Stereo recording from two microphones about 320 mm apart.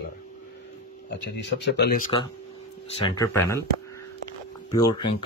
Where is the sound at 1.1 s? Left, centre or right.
Left.